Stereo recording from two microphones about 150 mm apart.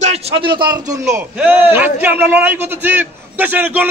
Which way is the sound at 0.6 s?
25° right (ahead or behind).